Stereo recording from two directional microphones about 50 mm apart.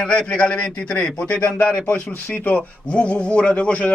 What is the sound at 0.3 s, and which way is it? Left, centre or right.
Speech, left.